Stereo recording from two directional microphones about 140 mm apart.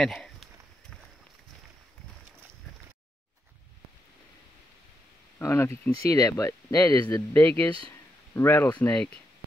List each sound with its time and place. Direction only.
0.0 s a sound: 5° left (ahead or behind)
5.4 s speech: 20° left (ahead or behind)
7.3 s speech: 15° left (ahead or behind)